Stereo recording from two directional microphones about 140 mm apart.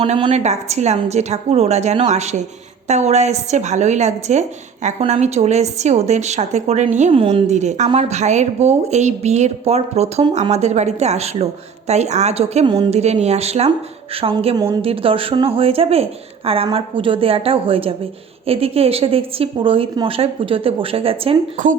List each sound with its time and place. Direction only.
0.0 s a woman's voice: 40° right (ahead or behind); by 6.8 s 55° right (ahead or behind)
7.1 s speech: 40° right (ahead or behind)
7.5 s a woman's voice: 55° right (ahead or behind)
12.6 s a woman's voice: 30° right (ahead or behind)
12.9 s a woman's voice: 50° right (ahead or behind)
14.5 s a woman's voice: 30° right (ahead or behind)
14.8 s a woman's voice: 40° right (ahead or behind)
21.6 s speech: 70° right (ahead or behind)